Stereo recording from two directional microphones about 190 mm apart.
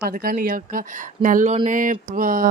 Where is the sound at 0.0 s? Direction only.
50° right (ahead or behind).